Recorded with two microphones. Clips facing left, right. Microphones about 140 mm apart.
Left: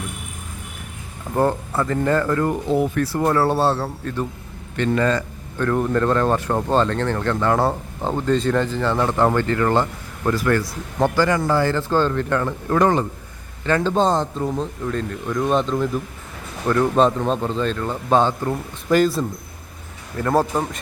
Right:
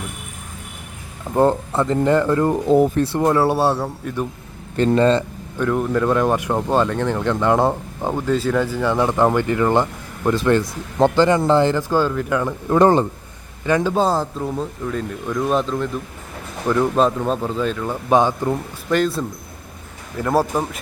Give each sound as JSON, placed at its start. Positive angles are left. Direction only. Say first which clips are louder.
{"t": 1.4, "sound": "speech", "louder": "right 3 dB", "side_deg": -25}
{"t": 2.6, "sound": "speech", "louder": "right 8 dB", "side_deg": -40}
{"t": 3.0, "sound": "speech", "louder": "right 2 dB", "side_deg": -20}
{"t": 4.8, "sound": "speech", "louder": "right 4 dB", "side_deg": -30}
{"t": 5.5, "sound": "speech", "louder": "even", "side_deg": -5}
{"t": 12.8, "sound": "speech", "louder": "right 4 dB", "side_deg": -30}
{"t": 13.7, "sound": "speech", "louder": "right 1 dB", "side_deg": -10}
{"t": 18.9, "sound": "speech", "louder": "left 2 dB", "side_deg": 0}
{"t": 20.1, "sound": "speech", "louder": "even", "side_deg": -10}